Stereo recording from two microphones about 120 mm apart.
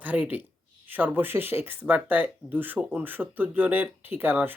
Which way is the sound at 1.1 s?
15° right (ahead or behind).